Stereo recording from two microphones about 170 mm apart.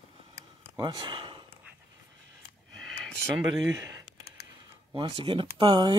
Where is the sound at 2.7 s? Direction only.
5° left (ahead or behind).